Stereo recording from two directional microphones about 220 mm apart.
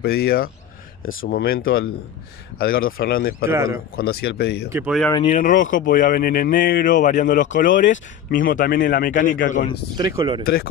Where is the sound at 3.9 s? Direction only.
45° left (ahead or behind).